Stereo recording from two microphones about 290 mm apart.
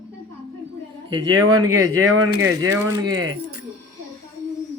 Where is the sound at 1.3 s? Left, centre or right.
Right.